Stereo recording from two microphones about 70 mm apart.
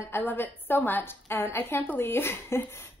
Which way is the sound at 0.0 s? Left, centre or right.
Left.